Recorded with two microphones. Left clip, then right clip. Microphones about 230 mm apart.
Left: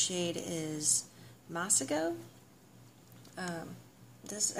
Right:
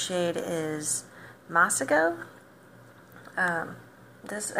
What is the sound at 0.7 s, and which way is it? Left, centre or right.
Speech, right.